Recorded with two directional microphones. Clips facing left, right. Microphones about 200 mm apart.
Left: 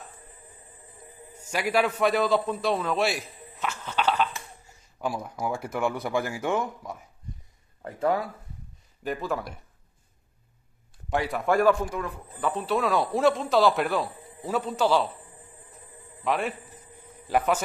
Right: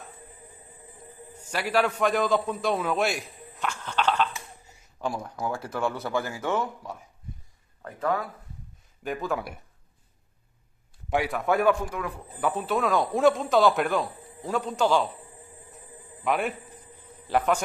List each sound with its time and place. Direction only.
1.3 s a man's voice: 10° left (ahead or behind)
7.8 s speech: 25° left (ahead or behind)
9.0 s speech: centre (ahead or behind)
11.1 s speech: centre (ahead or behind)
16.3 s speech: centre (ahead or behind)